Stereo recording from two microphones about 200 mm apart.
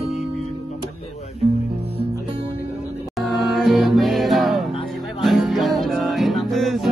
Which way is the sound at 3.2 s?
Centre (ahead or behind).